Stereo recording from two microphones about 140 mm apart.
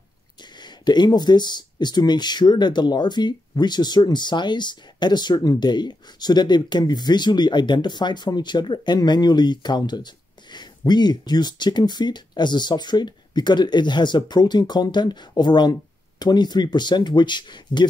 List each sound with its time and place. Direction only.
0.4 s speech: 30° left (ahead or behind)